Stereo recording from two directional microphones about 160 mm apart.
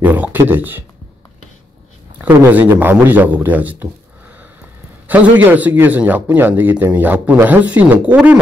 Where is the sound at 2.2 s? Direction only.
15° right (ahead or behind).